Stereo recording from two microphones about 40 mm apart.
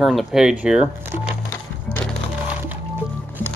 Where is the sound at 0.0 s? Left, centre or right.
Centre.